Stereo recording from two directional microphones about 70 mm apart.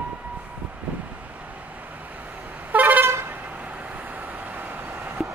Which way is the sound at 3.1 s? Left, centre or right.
Right.